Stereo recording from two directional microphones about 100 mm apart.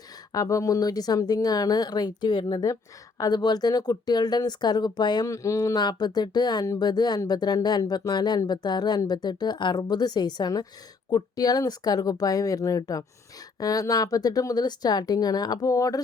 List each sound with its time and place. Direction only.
0.3 s speech: 30° left (ahead or behind)
5.3 s speech: 35° left (ahead or behind)